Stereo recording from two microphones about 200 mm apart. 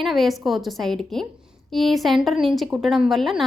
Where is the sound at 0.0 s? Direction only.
Centre (ahead or behind).